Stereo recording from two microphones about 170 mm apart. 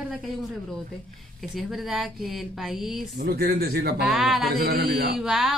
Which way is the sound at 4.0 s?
Centre (ahead or behind).